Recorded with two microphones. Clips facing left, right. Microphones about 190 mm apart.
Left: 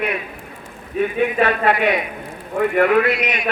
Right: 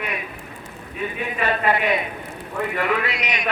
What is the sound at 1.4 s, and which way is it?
Speech, 65° left (ahead or behind).